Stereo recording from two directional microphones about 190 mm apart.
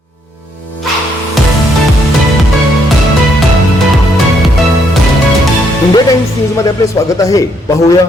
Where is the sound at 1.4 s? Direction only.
Centre (ahead or behind).